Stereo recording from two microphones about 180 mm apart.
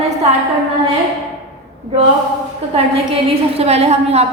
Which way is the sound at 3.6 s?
35° right (ahead or behind).